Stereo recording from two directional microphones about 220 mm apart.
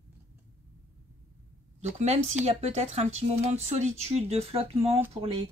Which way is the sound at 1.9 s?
30° right (ahead or behind).